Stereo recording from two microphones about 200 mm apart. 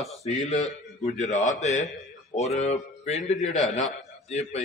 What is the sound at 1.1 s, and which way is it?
A man's voice, 35° left (ahead or behind).